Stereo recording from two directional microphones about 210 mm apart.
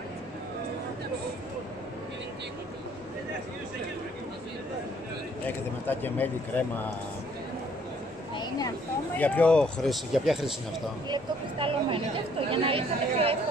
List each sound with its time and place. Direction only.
5.9 s speech: 10° left (ahead or behind)
9.2 s speech: 5° left (ahead or behind)
11.1 s speech: 25° right (ahead or behind)